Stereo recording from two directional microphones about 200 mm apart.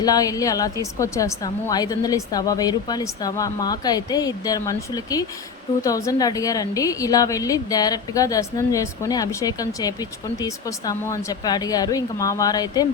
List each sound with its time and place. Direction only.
0.0 s a woman's voice: 20° left (ahead or behind)